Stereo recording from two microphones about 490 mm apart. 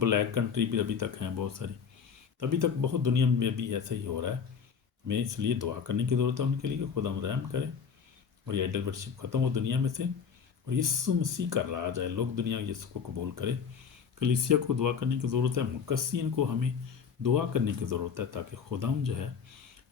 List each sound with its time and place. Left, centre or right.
0.0 s speech: right